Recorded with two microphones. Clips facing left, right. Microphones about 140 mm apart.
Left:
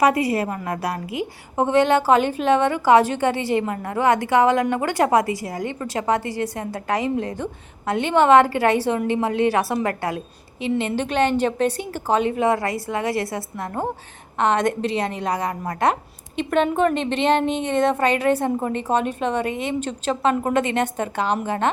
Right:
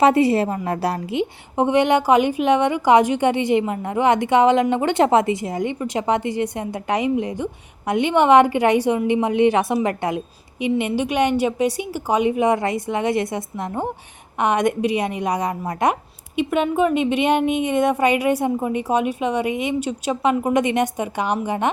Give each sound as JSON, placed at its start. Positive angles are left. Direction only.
{"t": 0.0, "sound": "a woman's voice", "side_deg": -30}